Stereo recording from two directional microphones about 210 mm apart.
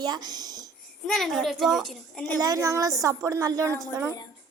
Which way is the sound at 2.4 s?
15° right (ahead or behind).